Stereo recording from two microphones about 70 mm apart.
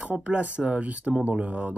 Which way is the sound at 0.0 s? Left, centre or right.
Centre.